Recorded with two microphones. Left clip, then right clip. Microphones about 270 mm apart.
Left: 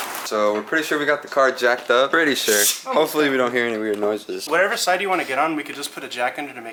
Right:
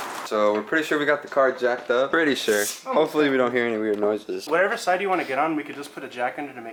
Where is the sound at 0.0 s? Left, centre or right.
Centre.